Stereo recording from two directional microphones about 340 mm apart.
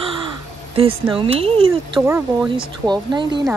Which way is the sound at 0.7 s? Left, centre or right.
Centre.